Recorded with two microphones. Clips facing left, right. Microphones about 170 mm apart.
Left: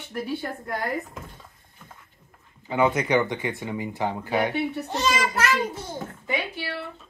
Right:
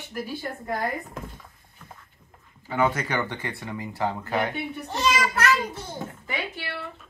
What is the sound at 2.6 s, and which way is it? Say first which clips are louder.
Speech: left 3 dB; 15° left (ahead or behind).